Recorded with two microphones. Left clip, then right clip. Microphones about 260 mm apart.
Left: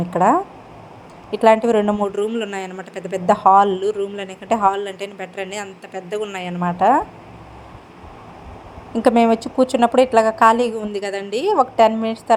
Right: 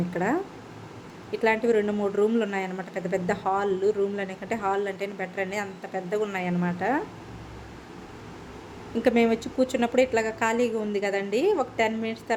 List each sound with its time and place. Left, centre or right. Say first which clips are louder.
0.1 s a woman's voice: left 14 dB; centre
9.0 s a woman's voice: left 8 dB; centre